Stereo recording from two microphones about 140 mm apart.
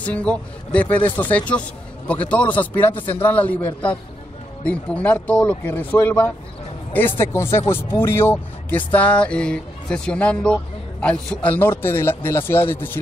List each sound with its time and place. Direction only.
0.0 s speech: 10° left (ahead or behind)